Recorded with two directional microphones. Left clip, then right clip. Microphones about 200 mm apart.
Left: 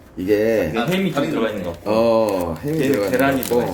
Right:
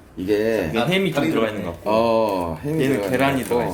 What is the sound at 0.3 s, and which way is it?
Speech, 15° left (ahead or behind).